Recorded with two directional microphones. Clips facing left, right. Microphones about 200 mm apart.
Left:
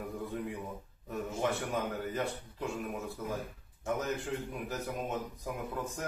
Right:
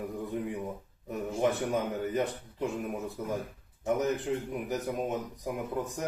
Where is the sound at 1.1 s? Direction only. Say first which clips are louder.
Right 4 dB; 15° right (ahead or behind).